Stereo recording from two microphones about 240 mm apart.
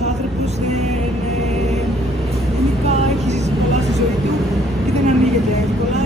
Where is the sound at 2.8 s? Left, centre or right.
Right.